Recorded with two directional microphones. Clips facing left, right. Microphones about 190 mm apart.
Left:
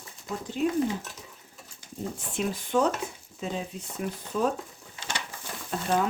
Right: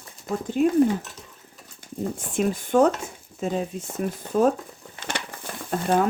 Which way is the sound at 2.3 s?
50° right (ahead or behind).